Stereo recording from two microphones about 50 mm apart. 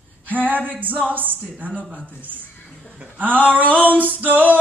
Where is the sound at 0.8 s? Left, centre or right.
Right.